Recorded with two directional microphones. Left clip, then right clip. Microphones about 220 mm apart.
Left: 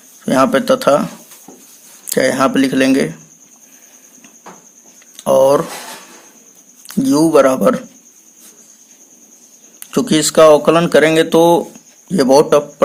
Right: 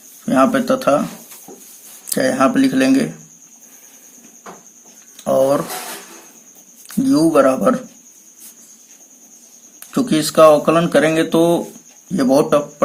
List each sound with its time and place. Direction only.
0.3 s speech: 35° left (ahead or behind)
2.0 s speech: 35° left (ahead or behind)
5.1 s speech: 30° left (ahead or behind)
6.8 s speech: 30° left (ahead or behind)
9.9 s speech: 35° left (ahead or behind)